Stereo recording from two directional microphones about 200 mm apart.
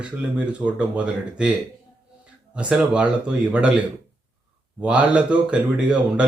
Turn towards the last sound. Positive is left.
turn(degrees=-5)  # may be behind; listen again after turning